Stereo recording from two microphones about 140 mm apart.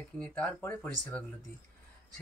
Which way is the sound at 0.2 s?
10° left (ahead or behind).